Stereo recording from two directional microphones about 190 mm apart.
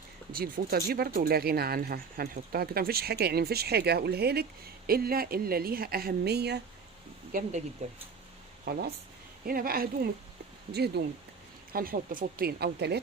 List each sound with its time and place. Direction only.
0.3 s speech: 50° right (ahead or behind)
7.8 s speech: 35° right (ahead or behind)
8.7 s speech: 55° right (ahead or behind)